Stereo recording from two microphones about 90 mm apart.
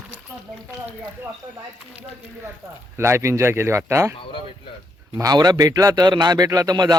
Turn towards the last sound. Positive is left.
turn(degrees=-45)  # may be behind; listen again after turning